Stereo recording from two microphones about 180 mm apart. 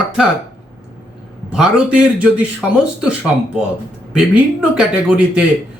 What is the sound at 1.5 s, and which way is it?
Speech, 5° right (ahead or behind).